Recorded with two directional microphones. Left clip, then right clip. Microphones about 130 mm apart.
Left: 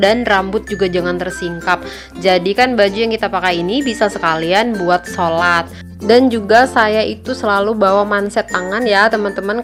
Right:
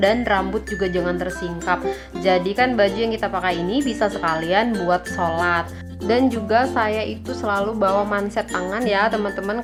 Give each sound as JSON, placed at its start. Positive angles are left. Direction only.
{"t": 0.0, "sound": "a woman's voice", "side_deg": 35}